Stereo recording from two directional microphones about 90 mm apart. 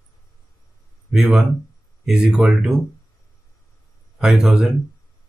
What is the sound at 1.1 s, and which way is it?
Speech, 5° right (ahead or behind).